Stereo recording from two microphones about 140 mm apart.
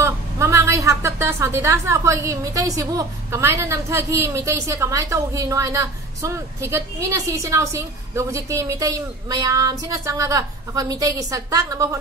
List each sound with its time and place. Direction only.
0.0 s a woman's voice: 20° right (ahead or behind)